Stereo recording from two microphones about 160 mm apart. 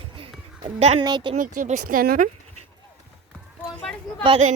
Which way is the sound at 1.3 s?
50° right (ahead or behind).